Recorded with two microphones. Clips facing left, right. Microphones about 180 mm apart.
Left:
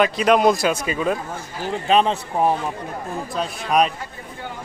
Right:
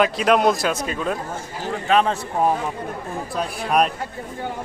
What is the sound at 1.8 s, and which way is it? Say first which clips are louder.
Speech: left 1 dB; 20° left (ahead or behind).